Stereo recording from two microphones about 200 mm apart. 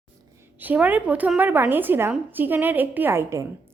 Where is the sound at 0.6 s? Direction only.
10° right (ahead or behind).